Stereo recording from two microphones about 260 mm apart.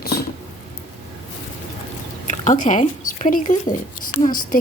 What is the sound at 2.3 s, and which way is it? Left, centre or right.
Speech, left.